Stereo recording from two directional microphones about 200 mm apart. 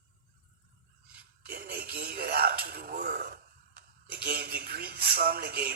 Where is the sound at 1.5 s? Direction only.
50° right (ahead or behind).